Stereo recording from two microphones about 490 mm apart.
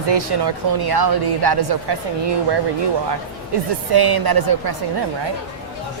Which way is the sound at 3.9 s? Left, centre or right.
Right.